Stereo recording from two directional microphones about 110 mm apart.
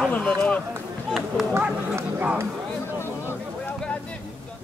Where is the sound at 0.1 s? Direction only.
10° left (ahead or behind).